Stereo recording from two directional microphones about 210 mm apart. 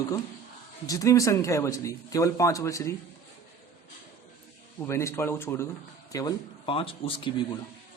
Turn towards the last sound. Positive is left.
turn(degrees=25)  # may be behind; listen again after turning